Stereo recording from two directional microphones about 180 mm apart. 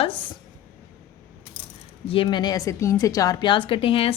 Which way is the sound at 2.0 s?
30° left (ahead or behind).